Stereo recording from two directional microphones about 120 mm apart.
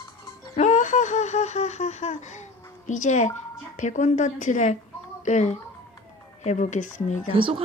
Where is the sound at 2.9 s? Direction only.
90° left.